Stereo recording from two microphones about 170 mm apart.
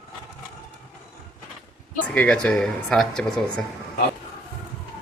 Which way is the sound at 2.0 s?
5° left (ahead or behind).